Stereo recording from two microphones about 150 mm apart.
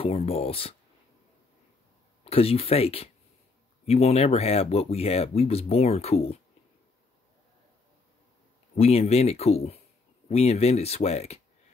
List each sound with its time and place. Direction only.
0.0 s speech: 40° left (ahead or behind)
2.2 s speech: 40° left (ahead or behind)
8.7 s speech: 45° left (ahead or behind)